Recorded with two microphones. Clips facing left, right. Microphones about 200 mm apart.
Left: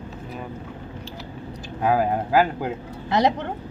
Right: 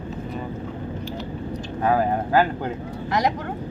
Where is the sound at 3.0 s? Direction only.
30° left (ahead or behind).